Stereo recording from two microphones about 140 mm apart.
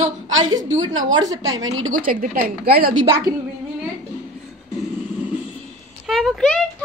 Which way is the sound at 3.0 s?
20° right (ahead or behind).